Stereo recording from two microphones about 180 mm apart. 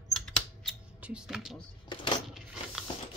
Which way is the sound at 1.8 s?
25° left (ahead or behind).